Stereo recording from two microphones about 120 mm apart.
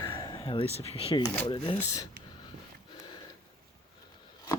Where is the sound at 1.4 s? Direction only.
45° left (ahead or behind).